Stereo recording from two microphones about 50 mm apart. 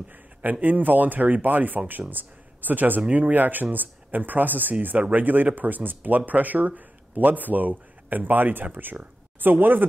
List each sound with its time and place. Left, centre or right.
0.1 s speech: right